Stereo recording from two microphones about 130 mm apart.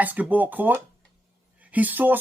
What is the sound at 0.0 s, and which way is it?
Speech, 10° right (ahead or behind).